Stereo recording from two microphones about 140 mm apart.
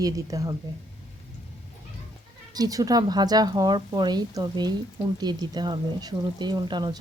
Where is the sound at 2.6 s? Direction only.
25° right (ahead or behind).